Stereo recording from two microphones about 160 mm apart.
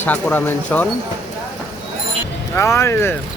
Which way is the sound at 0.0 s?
10° left (ahead or behind).